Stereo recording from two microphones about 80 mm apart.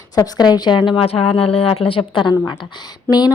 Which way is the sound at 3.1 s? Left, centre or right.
Left.